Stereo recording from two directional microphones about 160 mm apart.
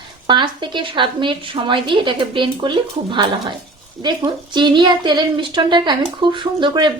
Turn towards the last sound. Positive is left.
turn(degrees=-30)  # may be behind; listen again after turning